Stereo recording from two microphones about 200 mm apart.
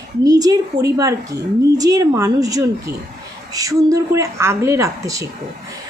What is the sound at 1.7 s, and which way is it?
A woman's voice, 20° right (ahead or behind).